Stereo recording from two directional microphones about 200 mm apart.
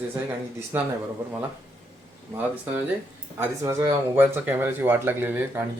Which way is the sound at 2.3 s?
10° right (ahead or behind).